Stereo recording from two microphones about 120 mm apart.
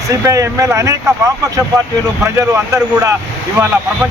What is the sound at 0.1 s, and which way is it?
Speech, 30° right (ahead or behind).